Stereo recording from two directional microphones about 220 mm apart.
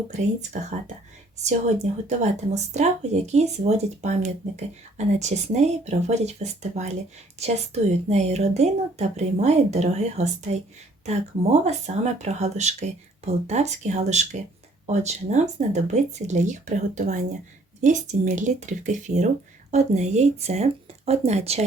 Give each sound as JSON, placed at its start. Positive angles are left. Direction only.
{"t": 0.5, "sound": "speech", "side_deg": -35}
{"t": 11.6, "sound": "speech", "side_deg": -30}